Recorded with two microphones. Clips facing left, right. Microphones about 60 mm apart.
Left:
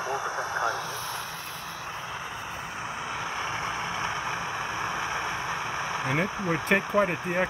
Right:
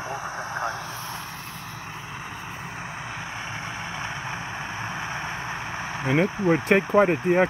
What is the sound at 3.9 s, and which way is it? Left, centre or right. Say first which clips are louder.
Vehicle: left 2 dB; right.